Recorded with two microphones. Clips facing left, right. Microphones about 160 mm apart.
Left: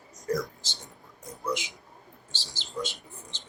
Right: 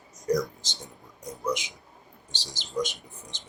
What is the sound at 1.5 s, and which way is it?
Speech, 20° right (ahead or behind).